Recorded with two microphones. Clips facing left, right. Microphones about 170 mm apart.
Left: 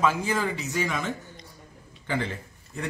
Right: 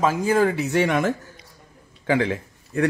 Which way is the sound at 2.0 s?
80° right.